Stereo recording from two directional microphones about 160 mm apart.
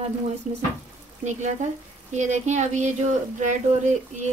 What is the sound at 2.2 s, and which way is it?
Speech, 45° right (ahead or behind).